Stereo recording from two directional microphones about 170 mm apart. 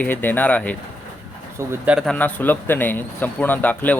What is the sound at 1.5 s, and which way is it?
Speech, 10° right (ahead or behind).